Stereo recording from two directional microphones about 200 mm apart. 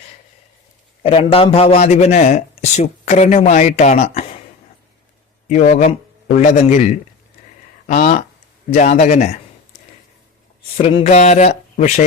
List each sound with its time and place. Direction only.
1.0 s a man's voice: 30° left (ahead or behind)
5.5 s a man's voice: 35° left (ahead or behind)
10.8 s a man's voice: 30° left (ahead or behind)